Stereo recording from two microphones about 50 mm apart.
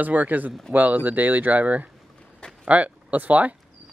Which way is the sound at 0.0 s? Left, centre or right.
Right.